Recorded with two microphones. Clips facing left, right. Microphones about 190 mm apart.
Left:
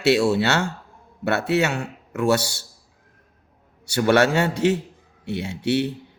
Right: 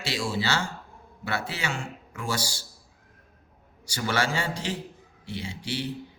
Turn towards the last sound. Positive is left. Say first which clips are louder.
# left 11 dB
turn(degrees=65)  # may be behind; listen again after turning